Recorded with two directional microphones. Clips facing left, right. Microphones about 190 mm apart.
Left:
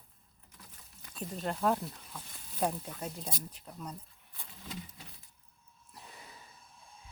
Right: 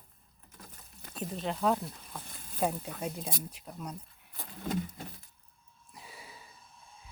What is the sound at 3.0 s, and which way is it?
Speech, 10° right (ahead or behind).